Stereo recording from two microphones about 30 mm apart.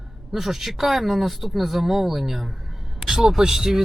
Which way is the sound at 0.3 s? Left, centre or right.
Centre.